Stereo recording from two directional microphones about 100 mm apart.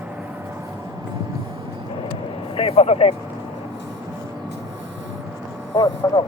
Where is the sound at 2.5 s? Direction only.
70° left (ahead or behind).